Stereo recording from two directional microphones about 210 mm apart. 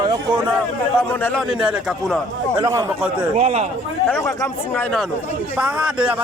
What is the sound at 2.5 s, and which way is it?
Speech, 15° right (ahead or behind).